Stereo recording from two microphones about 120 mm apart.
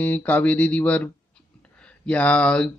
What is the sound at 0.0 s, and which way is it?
Speech, 15° left (ahead or behind).